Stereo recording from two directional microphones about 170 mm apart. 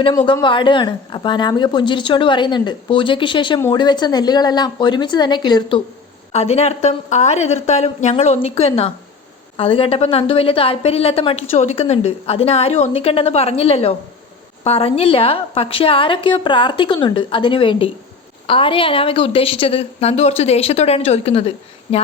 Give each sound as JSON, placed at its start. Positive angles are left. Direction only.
{"t": 0.4, "sound": "a woman's voice", "side_deg": 30}
{"t": 6.3, "sound": "a woman's voice", "side_deg": 40}